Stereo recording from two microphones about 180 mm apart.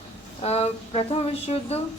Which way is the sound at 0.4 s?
35° left (ahead or behind).